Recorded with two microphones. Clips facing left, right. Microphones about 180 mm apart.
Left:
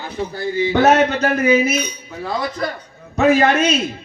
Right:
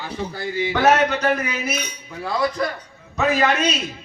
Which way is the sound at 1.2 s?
45° left (ahead or behind).